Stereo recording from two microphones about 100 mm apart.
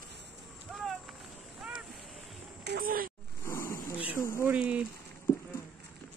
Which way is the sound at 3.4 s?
30° left (ahead or behind).